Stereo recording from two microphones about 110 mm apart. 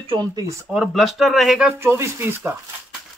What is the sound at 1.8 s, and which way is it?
Speech, 20° right (ahead or behind).